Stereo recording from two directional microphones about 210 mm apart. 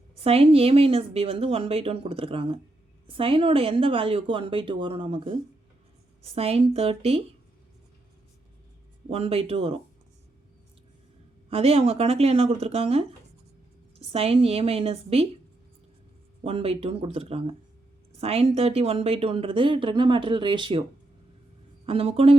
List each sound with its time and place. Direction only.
0.2 s speech: 30° right (ahead or behind)
9.0 s speech: 30° right (ahead or behind)
11.4 s speech: 30° right (ahead or behind)
14.1 s speech: 30° right (ahead or behind)
16.4 s speech: 30° right (ahead or behind)
21.8 s speech: 25° right (ahead or behind)